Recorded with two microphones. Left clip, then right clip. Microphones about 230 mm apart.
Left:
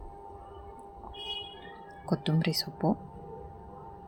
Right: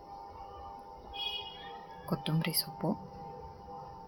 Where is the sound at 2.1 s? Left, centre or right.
Centre.